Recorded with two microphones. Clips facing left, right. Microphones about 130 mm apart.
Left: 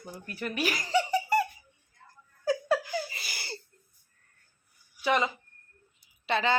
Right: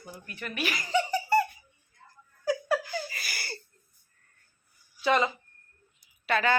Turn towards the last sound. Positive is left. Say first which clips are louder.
# right 1 dB
turn(degrees=25)  # may be behind; listen again after turning